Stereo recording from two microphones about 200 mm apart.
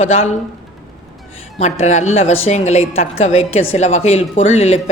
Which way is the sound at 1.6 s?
35° left (ahead or behind).